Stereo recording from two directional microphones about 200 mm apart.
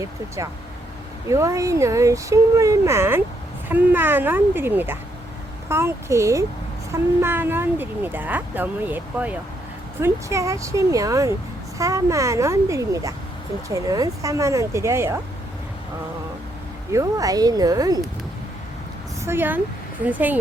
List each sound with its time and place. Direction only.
1.3 s speech: 15° right (ahead or behind)
16.9 s speech: 15° right (ahead or behind)
19.2 s speech: 10° right (ahead or behind)